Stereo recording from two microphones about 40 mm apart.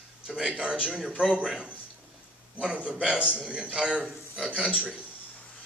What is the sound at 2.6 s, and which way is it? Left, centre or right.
Speech, right.